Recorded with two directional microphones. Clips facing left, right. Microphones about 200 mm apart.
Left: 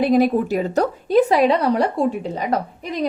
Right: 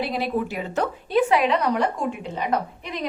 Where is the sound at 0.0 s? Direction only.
45° left (ahead or behind).